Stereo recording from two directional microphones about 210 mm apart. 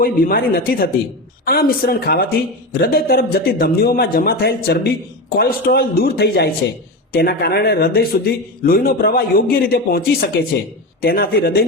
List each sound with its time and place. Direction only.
0.0 s a man's voice: 45° left (ahead or behind)